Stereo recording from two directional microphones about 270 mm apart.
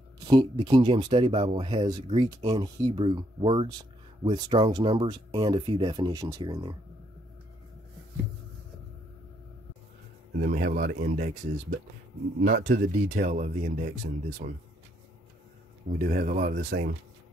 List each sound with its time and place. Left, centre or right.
0.3 s speech: centre
10.4 s speech: right
15.9 s speech: right